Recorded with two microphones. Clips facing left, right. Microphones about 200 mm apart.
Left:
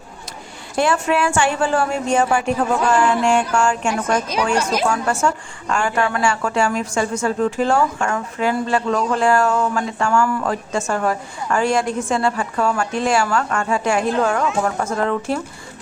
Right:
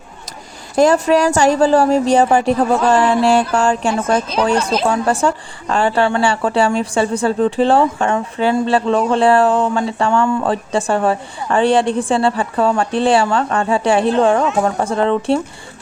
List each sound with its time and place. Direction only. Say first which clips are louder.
0.8 s a woman's voice: right 6 dB; 40° right (ahead or behind)
4.5 s a woman's voice: right 3 dB; 10° left (ahead or behind)
4.9 s a woman's voice: right 4 dB; 35° right (ahead or behind)